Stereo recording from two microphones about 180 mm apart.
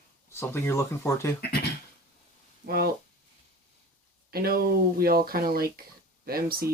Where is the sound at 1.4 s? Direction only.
60° left (ahead or behind).